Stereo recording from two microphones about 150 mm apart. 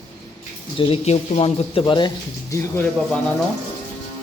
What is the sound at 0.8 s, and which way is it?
Speech, 40° left (ahead or behind).